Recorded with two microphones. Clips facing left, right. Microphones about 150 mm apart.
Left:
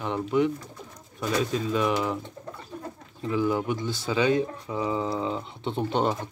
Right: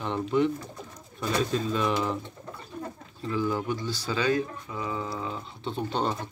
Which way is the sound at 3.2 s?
15° left (ahead or behind).